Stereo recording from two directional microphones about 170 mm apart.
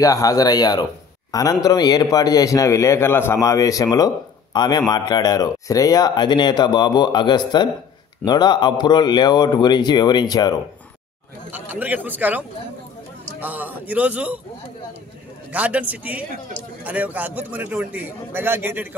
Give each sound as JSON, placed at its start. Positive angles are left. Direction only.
{"t": 0.0, "sound": "speech", "side_deg": 20}
{"t": 11.5, "sound": "a man's voice", "side_deg": -10}
{"t": 15.5, "sound": "a man's voice", "side_deg": -10}